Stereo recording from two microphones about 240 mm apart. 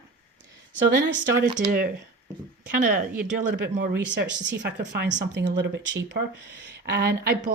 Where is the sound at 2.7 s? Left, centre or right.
Right.